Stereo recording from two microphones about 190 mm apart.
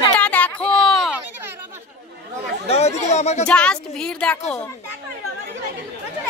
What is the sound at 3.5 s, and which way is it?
Speech, 5° left (ahead or behind).